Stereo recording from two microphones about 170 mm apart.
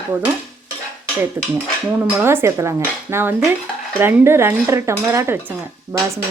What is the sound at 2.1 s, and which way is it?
A woman's voice, 15° right (ahead or behind).